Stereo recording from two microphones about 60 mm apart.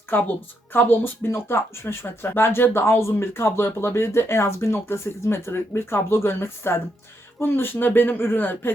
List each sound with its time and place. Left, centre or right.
0.1 s a man's voice: left